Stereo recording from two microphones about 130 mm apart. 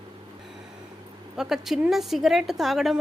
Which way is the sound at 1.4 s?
5° right (ahead or behind).